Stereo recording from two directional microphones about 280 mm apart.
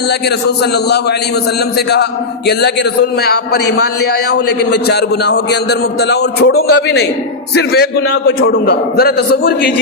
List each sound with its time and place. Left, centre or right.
0.3 s a man's voice: left
2.5 s a man's voice: left